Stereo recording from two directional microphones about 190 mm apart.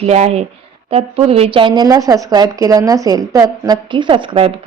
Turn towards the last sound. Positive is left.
turn(degrees=-30)  # may be behind; listen again after turning